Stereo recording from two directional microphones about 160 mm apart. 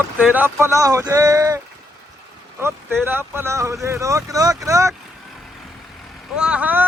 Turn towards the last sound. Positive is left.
turn(degrees=-10)  # may be behind; listen again after turning